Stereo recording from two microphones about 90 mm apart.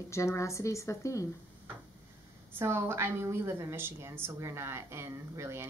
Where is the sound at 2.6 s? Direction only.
30° right (ahead or behind).